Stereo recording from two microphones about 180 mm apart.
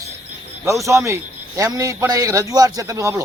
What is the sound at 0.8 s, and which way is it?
A man's voice, 15° right (ahead or behind).